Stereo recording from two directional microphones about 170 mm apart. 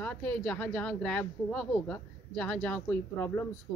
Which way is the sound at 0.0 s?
5° left (ahead or behind).